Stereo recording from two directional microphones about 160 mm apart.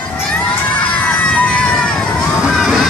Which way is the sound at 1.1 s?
5° left (ahead or behind).